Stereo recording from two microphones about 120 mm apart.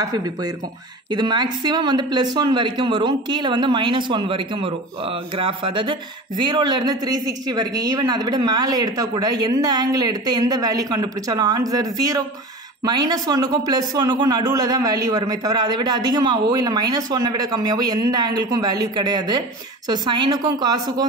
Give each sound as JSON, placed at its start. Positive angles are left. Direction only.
{"t": 0.0, "sound": "a man's voice", "side_deg": -30}